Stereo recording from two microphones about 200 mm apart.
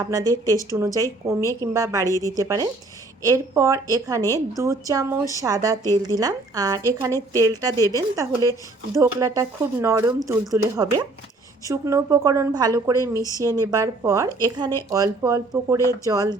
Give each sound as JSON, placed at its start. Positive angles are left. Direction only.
{"t": 0.0, "sound": "a woman's voice", "side_deg": -15}